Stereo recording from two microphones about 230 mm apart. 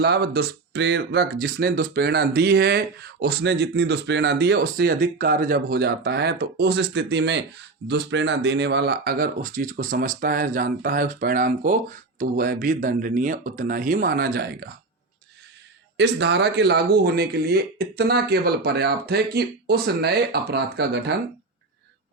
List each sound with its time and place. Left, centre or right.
0.0 s speech: right
16.0 s speech: right